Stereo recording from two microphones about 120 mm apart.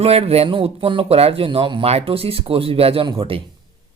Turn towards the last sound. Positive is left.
turn(degrees=-45)  # may be behind; listen again after turning